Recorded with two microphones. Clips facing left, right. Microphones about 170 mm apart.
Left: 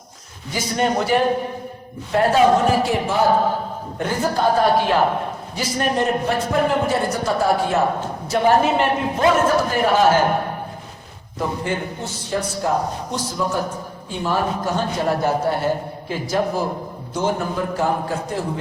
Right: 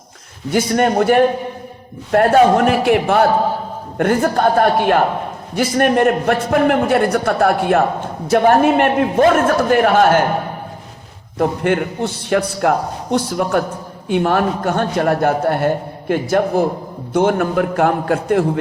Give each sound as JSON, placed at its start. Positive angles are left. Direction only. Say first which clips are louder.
{"t": 0.5, "sound": "a man's voice", "louder": "right 6 dB", "side_deg": -55}
{"t": 11.3, "sound": "a man's voice", "louder": "right 7 dB", "side_deg": -65}